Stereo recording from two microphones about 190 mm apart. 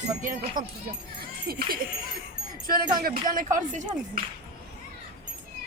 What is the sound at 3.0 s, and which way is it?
Speech, 50° right (ahead or behind).